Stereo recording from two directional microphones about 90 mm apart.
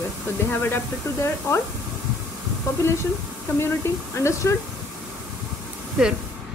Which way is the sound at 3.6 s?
30° left (ahead or behind).